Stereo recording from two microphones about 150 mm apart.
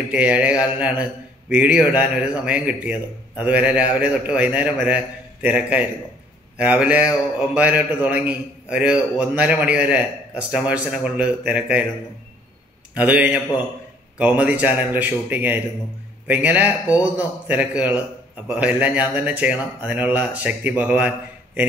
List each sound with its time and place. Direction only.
0.1 s a man's voice: 10° right (ahead or behind)
12.9 s a man's voice: 10° right (ahead or behind)